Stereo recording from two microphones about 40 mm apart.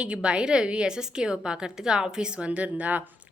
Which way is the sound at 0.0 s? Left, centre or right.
Right.